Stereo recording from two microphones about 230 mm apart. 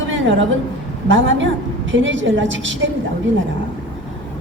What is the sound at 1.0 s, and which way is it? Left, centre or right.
A woman's voice, right.